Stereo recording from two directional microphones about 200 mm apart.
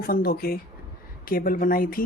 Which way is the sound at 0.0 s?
50° left (ahead or behind).